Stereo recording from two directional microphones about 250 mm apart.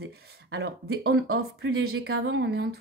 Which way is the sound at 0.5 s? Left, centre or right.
Right.